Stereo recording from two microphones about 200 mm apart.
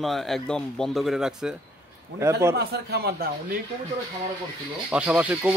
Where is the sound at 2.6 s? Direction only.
55° right (ahead or behind).